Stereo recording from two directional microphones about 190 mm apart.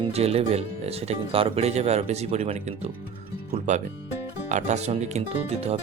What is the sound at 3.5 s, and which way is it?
Music, 40° right (ahead or behind).